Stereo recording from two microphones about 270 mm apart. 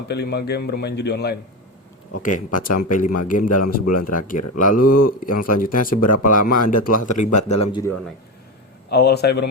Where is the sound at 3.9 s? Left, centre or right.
Left.